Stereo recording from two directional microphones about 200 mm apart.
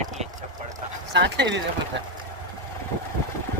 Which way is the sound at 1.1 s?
60° right (ahead or behind).